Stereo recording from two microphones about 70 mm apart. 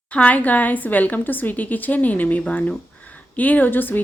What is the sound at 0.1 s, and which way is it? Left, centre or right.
A woman's voice, centre.